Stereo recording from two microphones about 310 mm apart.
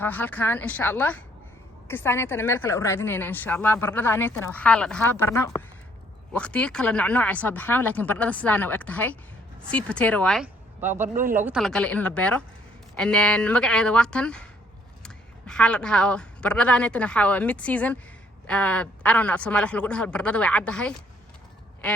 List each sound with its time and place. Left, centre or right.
0.0 s a woman's voice: centre
11.1 s speech: right
11.3 s a woman's voice: centre